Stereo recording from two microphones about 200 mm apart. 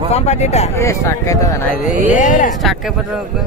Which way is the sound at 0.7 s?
15° left (ahead or behind).